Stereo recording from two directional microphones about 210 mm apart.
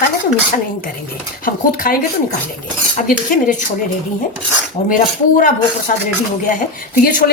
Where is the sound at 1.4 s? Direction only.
40° left (ahead or behind).